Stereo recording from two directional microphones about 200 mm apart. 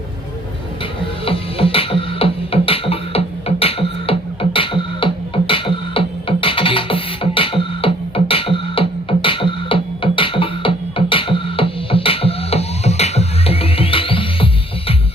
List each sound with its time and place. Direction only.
1.2 s music: 30° left (ahead or behind)